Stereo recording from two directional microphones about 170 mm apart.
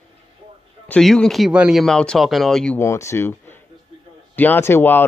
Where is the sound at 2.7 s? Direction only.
15° left (ahead or behind).